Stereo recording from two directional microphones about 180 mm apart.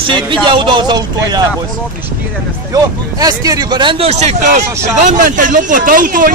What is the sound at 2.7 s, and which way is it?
Speech, 20° right (ahead or behind).